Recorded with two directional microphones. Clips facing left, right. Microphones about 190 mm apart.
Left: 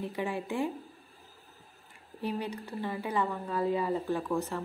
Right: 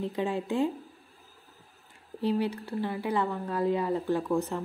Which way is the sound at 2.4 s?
15° left (ahead or behind).